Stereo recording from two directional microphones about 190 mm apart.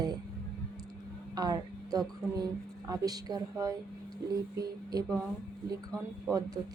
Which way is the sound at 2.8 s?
20° right (ahead or behind).